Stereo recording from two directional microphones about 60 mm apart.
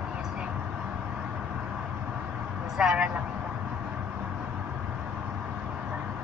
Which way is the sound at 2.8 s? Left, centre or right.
Centre.